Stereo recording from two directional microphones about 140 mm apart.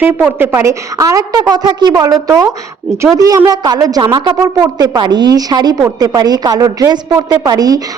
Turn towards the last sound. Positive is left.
turn(degrees=-25)  # may be behind; listen again after turning